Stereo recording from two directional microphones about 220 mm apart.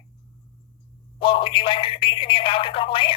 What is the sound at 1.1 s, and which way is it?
Speech, 25° left (ahead or behind).